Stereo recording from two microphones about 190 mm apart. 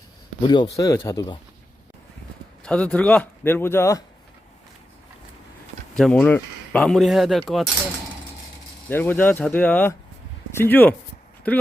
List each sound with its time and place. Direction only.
0.4 s speech: 20° left (ahead or behind)
2.6 s speech: 5° left (ahead or behind)
6.0 s speech: 5° left (ahead or behind)
8.9 s speech: 10° left (ahead or behind)